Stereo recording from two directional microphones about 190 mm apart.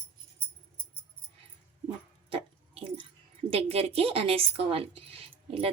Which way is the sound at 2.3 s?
30° right (ahead or behind).